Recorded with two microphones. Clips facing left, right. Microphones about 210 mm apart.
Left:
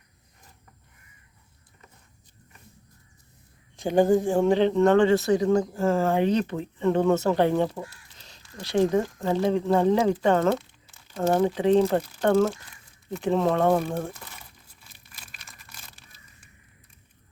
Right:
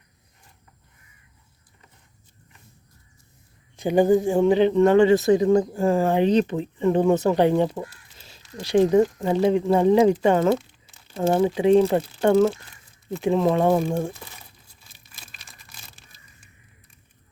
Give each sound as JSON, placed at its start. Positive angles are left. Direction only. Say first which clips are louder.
{"t": 3.8, "sound": "speech", "louder": "right 2 dB", "side_deg": 0}